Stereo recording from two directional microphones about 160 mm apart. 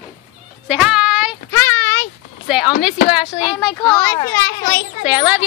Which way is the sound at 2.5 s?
5° right (ahead or behind).